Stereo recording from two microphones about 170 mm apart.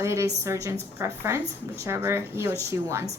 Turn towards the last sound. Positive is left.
turn(degrees=-15)  # may be behind; listen again after turning